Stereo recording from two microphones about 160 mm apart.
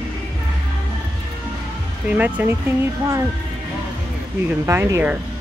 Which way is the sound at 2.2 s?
10° right (ahead or behind).